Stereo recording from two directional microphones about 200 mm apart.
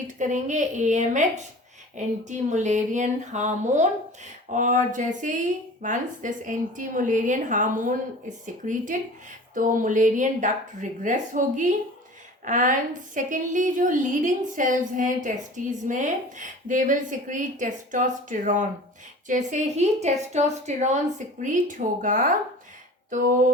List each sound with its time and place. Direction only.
0.2 s a woman's voice: 40° right (ahead or behind)